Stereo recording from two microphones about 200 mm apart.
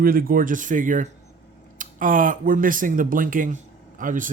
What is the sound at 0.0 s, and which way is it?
Speech, 45° right (ahead or behind).